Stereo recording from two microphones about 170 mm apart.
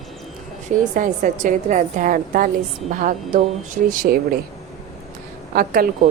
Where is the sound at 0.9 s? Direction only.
50° right (ahead or behind).